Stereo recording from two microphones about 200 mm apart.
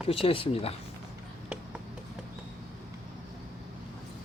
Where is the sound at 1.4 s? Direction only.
5° right (ahead or behind).